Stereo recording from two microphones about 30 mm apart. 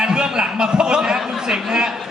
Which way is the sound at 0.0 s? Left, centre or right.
Right.